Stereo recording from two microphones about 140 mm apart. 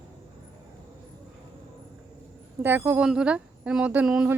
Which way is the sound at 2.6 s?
15° right (ahead or behind).